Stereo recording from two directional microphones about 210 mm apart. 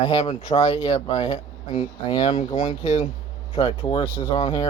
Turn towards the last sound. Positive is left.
turn(degrees=20)  # may be behind; listen again after turning